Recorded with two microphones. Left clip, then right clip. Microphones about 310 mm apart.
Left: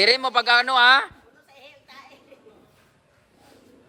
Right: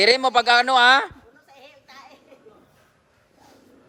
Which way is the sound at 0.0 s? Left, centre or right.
Centre.